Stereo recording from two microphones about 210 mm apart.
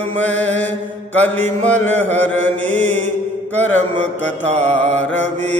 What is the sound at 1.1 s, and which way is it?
Mantra, 70° left (ahead or behind).